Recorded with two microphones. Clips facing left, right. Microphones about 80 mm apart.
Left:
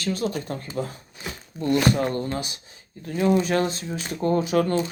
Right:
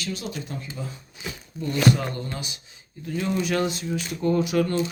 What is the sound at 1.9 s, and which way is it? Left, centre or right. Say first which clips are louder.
Speech: left 5 dB; left.